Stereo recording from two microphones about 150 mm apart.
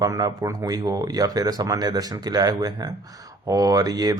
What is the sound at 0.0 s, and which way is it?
A man's voice, 25° right (ahead or behind).